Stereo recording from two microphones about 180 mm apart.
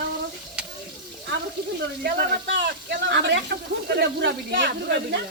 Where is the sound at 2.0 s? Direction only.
65° right (ahead or behind).